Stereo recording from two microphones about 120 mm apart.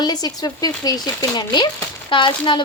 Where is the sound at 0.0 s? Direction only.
35° left (ahead or behind).